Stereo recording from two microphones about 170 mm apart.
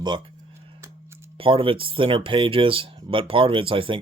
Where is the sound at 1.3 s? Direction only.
30° right (ahead or behind).